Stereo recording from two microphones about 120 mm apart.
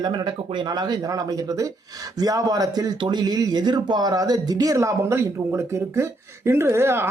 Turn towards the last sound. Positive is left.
turn(degrees=-20)  # may be behind; listen again after turning